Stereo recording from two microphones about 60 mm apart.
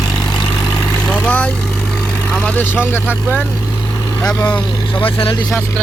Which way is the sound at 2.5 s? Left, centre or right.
Left.